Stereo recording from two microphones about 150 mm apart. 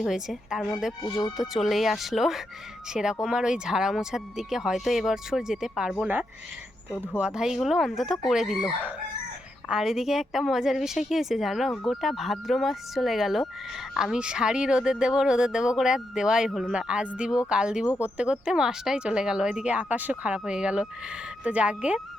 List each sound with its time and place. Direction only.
0.0 s speech: 5° right (ahead or behind)
1.0 s speech: 25° left (ahead or behind)
1.4 s speech: centre (ahead or behind)